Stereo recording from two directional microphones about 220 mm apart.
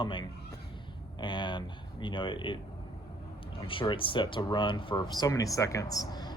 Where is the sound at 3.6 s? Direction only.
20° left (ahead or behind).